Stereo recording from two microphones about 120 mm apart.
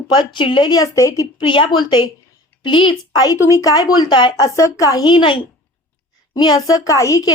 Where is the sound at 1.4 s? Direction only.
45° left (ahead or behind).